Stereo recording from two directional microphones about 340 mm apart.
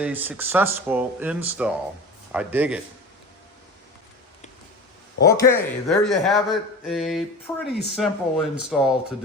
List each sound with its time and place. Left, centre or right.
0.0 s speech: centre
5.1 s speech: left
5.4 s speech: centre